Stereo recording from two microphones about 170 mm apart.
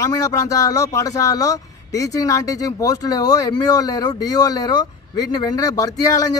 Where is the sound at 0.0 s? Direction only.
20° left (ahead or behind).